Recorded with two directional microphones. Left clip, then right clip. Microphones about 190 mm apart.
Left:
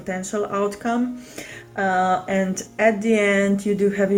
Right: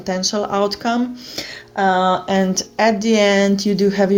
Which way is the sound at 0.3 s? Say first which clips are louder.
Right 4 dB; 40° right (ahead or behind).